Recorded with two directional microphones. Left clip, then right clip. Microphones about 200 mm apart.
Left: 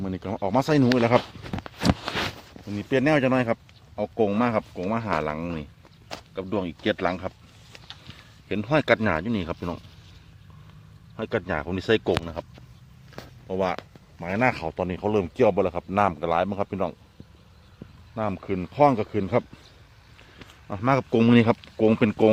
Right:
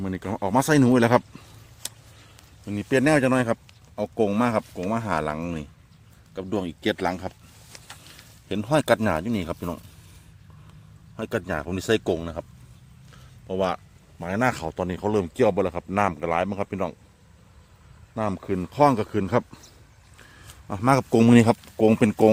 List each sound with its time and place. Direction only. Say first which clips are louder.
0.0 s a man's voice: right 1 dB; 10° right (ahead or behind)
2.6 s a man's voice: right 1 dB; 20° right (ahead or behind)
11.2 s speech: left 1 dB; 10° right (ahead or behind)
13.1 s a sound: even; 10° right (ahead or behind)
14.2 s a man's voice: left 1 dB; 15° right (ahead or behind)
18.1 s a man's voice: right 1 dB; 20° right (ahead or behind)
20.7 s speech: right 2 dB; 25° right (ahead or behind)